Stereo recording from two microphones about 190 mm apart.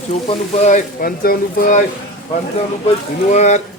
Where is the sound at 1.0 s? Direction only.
50° left (ahead or behind).